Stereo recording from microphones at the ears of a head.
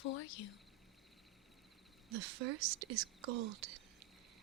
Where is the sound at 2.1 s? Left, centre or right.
Right.